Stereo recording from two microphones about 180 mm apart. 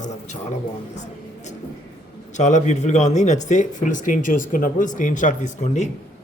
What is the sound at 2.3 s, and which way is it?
Speech, 40° left (ahead or behind).